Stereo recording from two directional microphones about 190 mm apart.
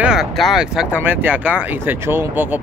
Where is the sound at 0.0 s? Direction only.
5° right (ahead or behind).